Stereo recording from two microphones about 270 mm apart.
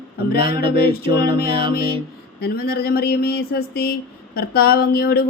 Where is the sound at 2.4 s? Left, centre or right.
Left.